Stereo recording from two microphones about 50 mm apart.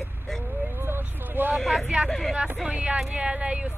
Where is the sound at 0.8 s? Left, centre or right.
Right.